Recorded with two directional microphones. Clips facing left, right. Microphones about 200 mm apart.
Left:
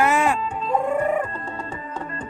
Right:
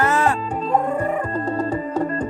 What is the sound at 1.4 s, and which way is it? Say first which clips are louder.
Music: right 10 dB; 40° right (ahead or behind).